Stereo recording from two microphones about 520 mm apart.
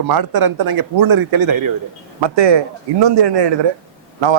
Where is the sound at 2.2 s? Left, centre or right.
Right.